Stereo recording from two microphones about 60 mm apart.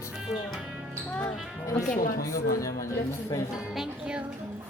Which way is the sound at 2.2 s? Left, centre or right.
Left.